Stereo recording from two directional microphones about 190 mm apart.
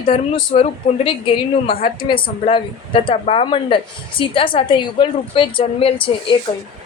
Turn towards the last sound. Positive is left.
turn(degrees=25)  # may be behind; listen again after turning